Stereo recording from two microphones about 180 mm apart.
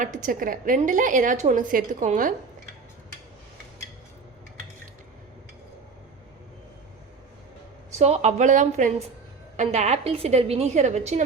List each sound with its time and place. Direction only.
0.0 s a woman's voice: 45° right (ahead or behind)
7.9 s a woman's voice: 35° right (ahead or behind)